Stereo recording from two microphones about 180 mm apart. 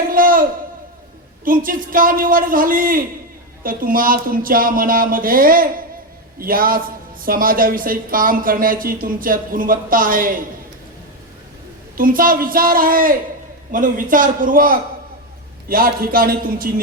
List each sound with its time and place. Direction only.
0.1 s a sound: 50° right (ahead or behind)
1.5 s speech: 50° right (ahead or behind)
11.9 s a man's voice: 50° right (ahead or behind)